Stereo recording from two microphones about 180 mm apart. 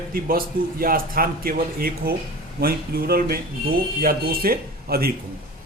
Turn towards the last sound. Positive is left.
turn(degrees=-55)  # may be behind; listen again after turning